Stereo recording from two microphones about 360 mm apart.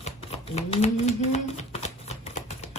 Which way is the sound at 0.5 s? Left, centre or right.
Centre.